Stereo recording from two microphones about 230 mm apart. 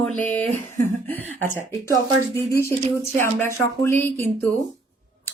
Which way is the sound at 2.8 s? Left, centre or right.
Right.